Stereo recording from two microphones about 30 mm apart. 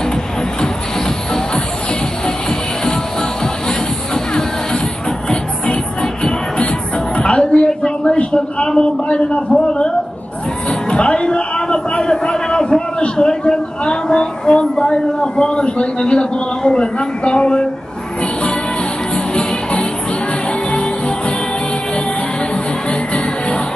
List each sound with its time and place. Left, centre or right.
0.6 s music: left
4.1 s music: left
7.2 s a sound: left
10.7 s a sound: left
19.1 s music: left
22.8 s music: left